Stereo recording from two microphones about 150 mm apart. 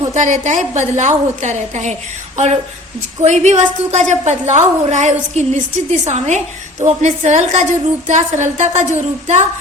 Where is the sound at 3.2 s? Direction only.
50° right (ahead or behind).